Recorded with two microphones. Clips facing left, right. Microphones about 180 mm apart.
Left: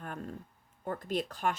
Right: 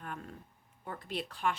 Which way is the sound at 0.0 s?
40° left (ahead or behind).